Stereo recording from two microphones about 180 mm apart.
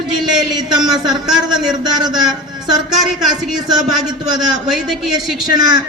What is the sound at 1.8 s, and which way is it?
Speech, 25° right (ahead or behind).